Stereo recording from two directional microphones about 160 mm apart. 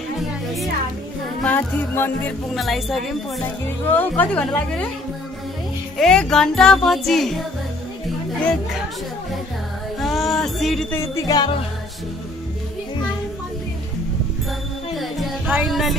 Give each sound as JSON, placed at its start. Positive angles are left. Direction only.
{"t": 1.4, "sound": "speech", "side_deg": 10}
{"t": 3.6, "sound": "speech", "side_deg": 10}
{"t": 5.9, "sound": "speech", "side_deg": 5}
{"t": 9.9, "sound": "music", "side_deg": 0}
{"t": 10.9, "sound": "music", "side_deg": 20}
{"t": 15.4, "sound": "music", "side_deg": -10}
{"t": 15.7, "sound": "speech", "side_deg": 0}